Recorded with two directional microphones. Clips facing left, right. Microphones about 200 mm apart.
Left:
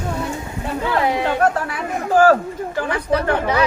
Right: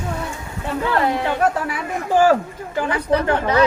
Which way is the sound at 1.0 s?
15° left (ahead or behind).